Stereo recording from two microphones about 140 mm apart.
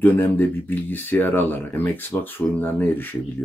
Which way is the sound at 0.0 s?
15° left (ahead or behind).